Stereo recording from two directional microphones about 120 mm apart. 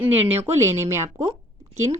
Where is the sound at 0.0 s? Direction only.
15° right (ahead or behind).